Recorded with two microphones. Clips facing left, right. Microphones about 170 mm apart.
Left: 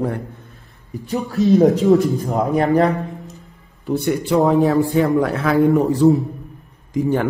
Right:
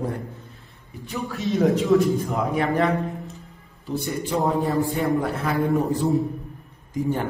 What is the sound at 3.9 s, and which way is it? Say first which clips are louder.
A man's voice: left 8 dB; 65° left (ahead or behind).